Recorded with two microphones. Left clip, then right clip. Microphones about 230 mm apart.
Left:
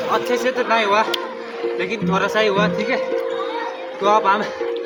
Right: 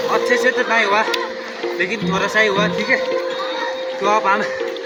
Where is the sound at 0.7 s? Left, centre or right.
Centre.